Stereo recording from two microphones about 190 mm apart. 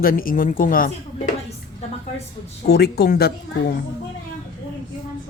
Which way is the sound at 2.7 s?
55° left (ahead or behind).